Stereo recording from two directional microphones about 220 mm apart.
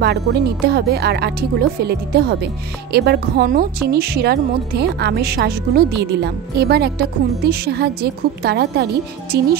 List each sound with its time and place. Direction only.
0.0 s a woman's voice: 50° right (ahead or behind)